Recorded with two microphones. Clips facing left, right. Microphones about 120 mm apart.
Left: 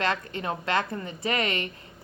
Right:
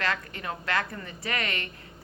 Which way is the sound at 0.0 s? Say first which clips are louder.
Left 3 dB; 20° left (ahead or behind).